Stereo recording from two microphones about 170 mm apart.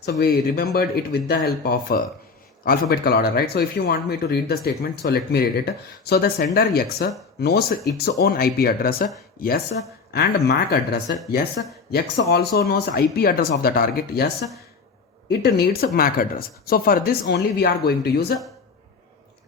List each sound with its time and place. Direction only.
0.2 s speech: 65° left (ahead or behind)
10.1 s speech: 70° left (ahead or behind)
15.3 s speech: 65° left (ahead or behind)